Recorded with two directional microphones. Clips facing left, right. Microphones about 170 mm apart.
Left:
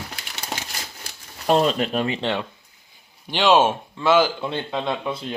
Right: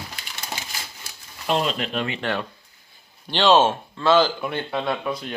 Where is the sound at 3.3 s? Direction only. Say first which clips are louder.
Even; 15° left (ahead or behind).